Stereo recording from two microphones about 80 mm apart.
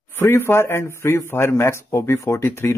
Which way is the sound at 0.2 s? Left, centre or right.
Left.